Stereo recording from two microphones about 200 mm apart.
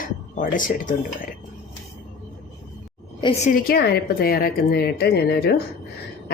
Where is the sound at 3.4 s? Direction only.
45° left (ahead or behind).